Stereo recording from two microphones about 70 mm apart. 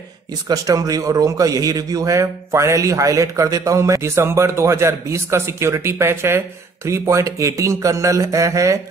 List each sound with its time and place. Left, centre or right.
0.5 s a man's voice: right